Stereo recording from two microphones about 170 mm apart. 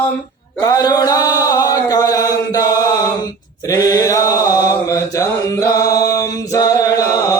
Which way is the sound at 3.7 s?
20° left (ahead or behind).